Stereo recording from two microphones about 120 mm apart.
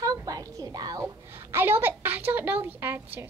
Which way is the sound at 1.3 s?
20° right (ahead or behind).